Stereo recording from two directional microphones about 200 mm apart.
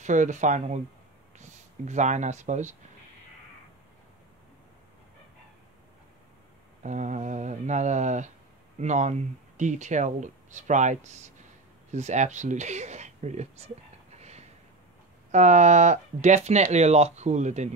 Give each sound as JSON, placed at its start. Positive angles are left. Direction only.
{"t": 0.0, "sound": "speech", "side_deg": -40}
{"t": 6.8, "sound": "speech", "side_deg": -35}
{"t": 14.1, "sound": "a sound", "side_deg": -35}
{"t": 15.3, "sound": "speech", "side_deg": -35}